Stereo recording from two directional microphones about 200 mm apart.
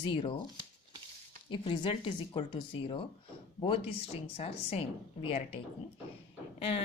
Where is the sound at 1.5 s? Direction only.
25° left (ahead or behind).